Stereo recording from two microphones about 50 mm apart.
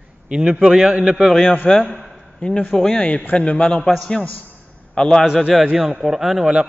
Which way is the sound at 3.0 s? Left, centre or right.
Left.